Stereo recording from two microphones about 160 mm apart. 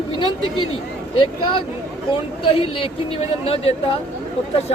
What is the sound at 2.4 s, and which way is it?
Speech, 35° left (ahead or behind).